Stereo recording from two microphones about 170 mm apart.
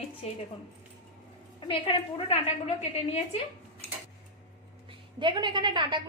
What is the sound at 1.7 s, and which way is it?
Speech, 30° left (ahead or behind).